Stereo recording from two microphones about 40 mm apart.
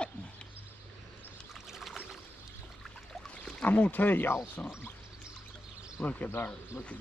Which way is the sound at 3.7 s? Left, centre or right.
Left.